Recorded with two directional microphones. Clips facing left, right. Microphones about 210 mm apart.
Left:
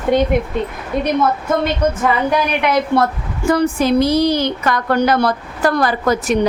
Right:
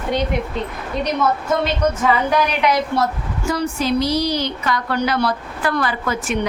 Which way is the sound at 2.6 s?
55° left (ahead or behind).